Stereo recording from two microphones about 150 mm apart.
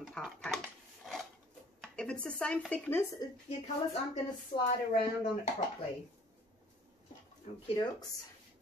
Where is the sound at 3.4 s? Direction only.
40° left (ahead or behind).